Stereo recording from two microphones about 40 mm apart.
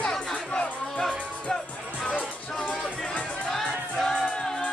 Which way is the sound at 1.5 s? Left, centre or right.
Centre.